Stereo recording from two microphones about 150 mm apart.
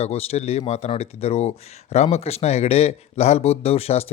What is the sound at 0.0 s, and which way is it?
Speech, 45° left (ahead or behind).